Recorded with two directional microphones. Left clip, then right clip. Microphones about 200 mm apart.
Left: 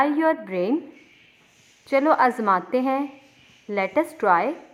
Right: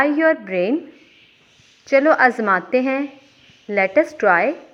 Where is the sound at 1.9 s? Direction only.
5° left (ahead or behind).